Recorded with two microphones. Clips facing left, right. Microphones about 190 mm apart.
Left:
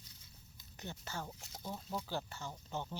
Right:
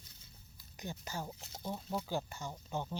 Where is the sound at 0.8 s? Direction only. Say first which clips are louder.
Right 2 dB; 10° right (ahead or behind).